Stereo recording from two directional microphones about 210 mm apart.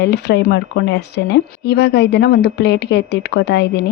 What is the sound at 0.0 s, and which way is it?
A woman's voice, 50° left (ahead or behind).